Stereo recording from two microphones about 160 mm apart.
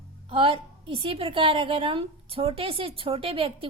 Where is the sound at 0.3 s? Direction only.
35° right (ahead or behind).